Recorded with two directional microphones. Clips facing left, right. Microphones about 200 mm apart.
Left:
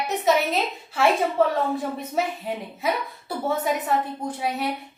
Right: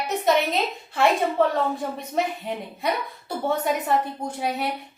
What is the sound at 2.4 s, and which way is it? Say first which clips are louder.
A woman's voice: even; centre (ahead or behind).